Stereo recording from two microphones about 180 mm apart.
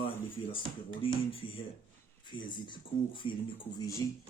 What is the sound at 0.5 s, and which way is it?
Speech, 30° left (ahead or behind).